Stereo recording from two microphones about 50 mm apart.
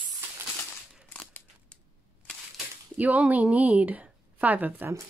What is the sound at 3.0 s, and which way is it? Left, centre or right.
A woman's voice, right.